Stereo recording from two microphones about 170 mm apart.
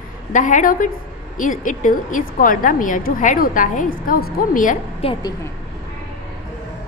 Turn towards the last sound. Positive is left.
turn(degrees=30)  # may be behind; listen again after turning